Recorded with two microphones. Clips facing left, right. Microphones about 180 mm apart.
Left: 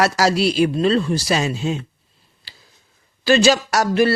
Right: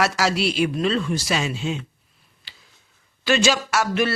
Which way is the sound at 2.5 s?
35° left (ahead or behind).